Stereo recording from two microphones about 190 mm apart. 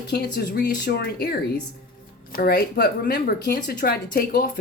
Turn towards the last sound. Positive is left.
turn(degrees=50)  # may be behind; listen again after turning